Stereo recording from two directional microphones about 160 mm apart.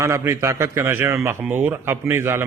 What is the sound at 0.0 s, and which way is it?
A man's voice, 20° right (ahead or behind).